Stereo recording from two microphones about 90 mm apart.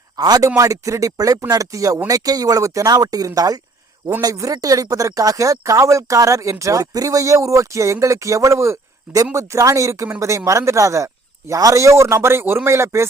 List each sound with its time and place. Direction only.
0.2 s speech: 45° right (ahead or behind)